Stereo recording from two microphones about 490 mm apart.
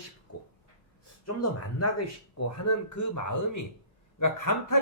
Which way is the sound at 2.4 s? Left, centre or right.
Left.